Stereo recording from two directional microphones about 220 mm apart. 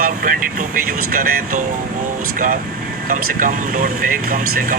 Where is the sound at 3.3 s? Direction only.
35° right (ahead or behind).